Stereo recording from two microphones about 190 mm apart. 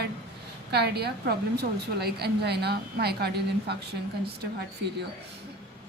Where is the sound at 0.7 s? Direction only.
60° right (ahead or behind).